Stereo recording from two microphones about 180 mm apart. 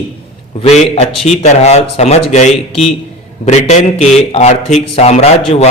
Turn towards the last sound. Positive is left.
turn(degrees=35)  # may be behind; listen again after turning